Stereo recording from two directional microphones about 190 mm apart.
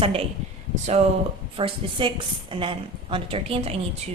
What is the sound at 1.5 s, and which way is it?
A woman's voice, 25° right (ahead or behind).